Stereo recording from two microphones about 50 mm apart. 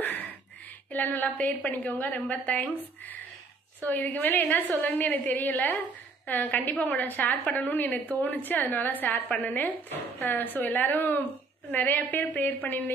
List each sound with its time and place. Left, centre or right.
0.9 s a woman's voice: left
1.6 s a woman's voice: left